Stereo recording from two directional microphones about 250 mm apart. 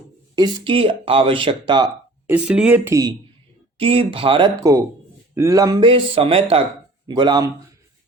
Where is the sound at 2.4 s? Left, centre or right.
Centre.